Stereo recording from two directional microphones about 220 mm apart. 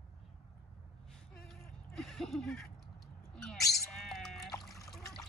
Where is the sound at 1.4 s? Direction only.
Centre (ahead or behind).